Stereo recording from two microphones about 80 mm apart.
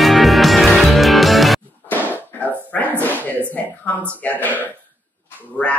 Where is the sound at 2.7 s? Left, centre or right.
Left.